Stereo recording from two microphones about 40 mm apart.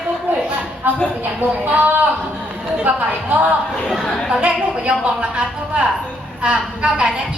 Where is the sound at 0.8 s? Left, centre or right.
Right.